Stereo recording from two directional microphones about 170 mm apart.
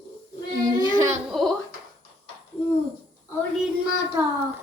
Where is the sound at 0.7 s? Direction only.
20° right (ahead or behind).